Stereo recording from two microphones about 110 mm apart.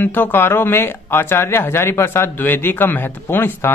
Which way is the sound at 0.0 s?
20° left (ahead or behind).